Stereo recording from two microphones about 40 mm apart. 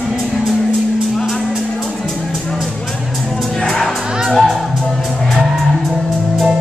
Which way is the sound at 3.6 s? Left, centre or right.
Centre.